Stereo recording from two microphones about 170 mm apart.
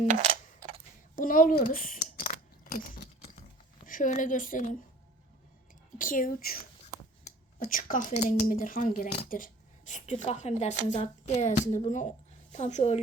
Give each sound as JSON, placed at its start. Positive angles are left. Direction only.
{"t": 0.1, "sound": "a sound", "side_deg": -45}
{"t": 1.1, "sound": "speech", "side_deg": 55}
{"t": 3.8, "sound": "speech", "side_deg": 50}
{"t": 6.0, "sound": "speech", "side_deg": 55}
{"t": 7.6, "sound": "a woman's voice", "side_deg": 50}